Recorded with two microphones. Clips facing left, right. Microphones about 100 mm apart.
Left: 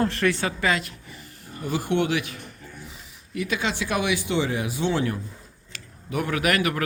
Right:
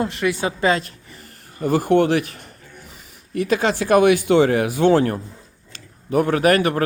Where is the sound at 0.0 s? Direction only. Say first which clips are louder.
Right 2 dB; 15° right (ahead or behind).